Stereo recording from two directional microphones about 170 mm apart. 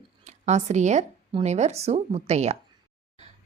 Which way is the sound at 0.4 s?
40° right (ahead or behind).